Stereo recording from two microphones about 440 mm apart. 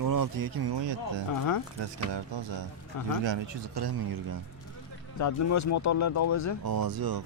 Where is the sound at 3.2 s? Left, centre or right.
Right.